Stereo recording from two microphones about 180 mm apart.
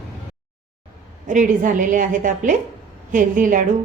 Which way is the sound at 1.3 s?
45° right (ahead or behind).